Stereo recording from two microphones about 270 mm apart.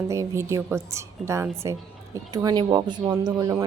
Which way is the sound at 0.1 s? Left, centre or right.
Centre.